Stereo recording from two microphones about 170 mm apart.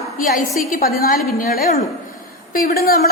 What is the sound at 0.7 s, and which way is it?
A woman's voice, 60° left (ahead or behind).